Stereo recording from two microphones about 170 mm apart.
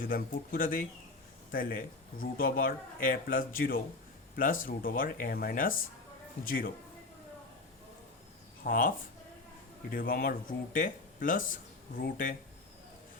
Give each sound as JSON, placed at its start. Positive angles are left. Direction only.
{"t": 0.0, "sound": "a man's voice", "side_deg": 55}
{"t": 8.6, "sound": "a man's voice", "side_deg": 55}
{"t": 9.9, "sound": "a man's voice", "side_deg": 55}